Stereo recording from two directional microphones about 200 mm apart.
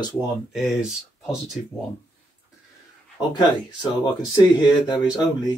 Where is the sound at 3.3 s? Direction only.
20° left (ahead or behind).